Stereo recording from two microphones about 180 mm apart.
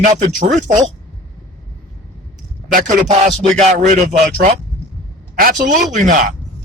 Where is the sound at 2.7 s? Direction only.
45° right (ahead or behind).